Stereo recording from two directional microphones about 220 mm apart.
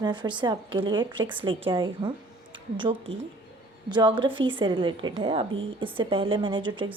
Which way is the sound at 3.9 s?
20° right (ahead or behind).